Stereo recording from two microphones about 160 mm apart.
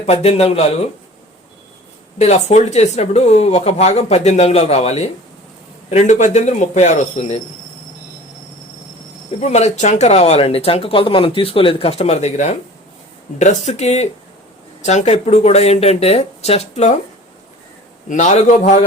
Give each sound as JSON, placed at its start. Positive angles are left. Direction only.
{"t": 0.0, "sound": "speech", "side_deg": 40}
{"t": 2.1, "sound": "speech", "side_deg": 45}
{"t": 9.4, "sound": "speech", "side_deg": 45}
{"t": 18.1, "sound": "speech", "side_deg": 45}